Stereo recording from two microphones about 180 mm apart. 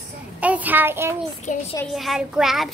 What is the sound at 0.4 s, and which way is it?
Speech, 10° right (ahead or behind).